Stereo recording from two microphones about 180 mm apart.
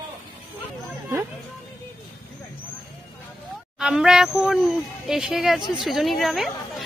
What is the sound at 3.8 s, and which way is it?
Speech, 5° right (ahead or behind).